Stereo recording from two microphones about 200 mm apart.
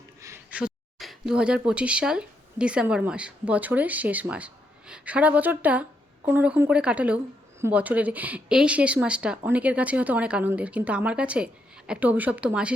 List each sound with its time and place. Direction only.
0.2 s speech: 10° right (ahead or behind)